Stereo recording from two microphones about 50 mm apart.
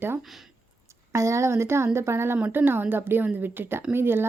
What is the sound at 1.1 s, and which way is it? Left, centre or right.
Speech, right.